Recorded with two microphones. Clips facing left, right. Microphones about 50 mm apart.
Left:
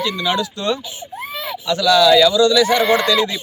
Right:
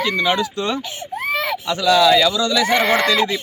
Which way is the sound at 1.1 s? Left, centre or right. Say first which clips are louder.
Right 7 dB; right.